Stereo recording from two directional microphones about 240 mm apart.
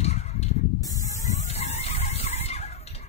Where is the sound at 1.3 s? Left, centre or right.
Left.